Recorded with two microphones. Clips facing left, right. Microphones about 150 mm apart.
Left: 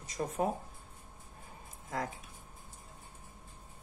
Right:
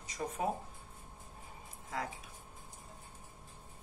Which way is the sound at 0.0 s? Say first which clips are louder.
Left 4 dB; 45° left (ahead or behind).